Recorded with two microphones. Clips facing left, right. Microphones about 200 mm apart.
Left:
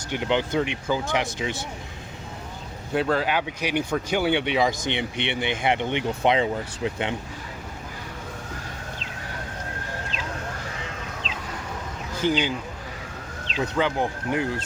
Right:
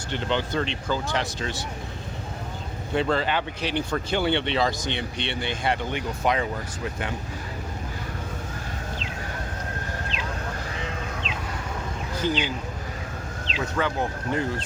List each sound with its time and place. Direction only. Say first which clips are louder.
0.1 s speech: left 3 dB; 15° left (ahead or behind)
2.9 s speech: left 1 dB; 5° left (ahead or behind); by 7.1 s 20° left (ahead or behind)
12.2 s speech: left 3 dB; 10° left (ahead or behind)
13.7 s speech: left 2 dB; 15° left (ahead or behind)